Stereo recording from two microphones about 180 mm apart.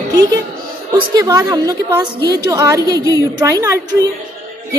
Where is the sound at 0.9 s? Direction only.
25° right (ahead or behind).